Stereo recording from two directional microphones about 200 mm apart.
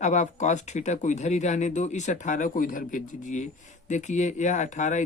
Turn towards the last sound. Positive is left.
turn(degrees=35)  # may be behind; listen again after turning